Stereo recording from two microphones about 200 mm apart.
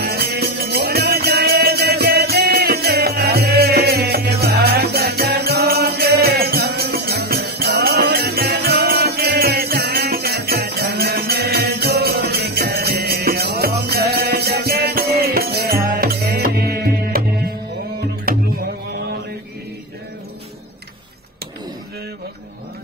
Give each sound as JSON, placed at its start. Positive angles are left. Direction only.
{"t": 0.0, "sound": "music", "side_deg": -55}